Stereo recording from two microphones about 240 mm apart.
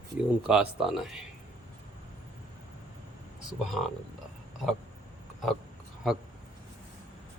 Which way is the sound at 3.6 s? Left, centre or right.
Centre.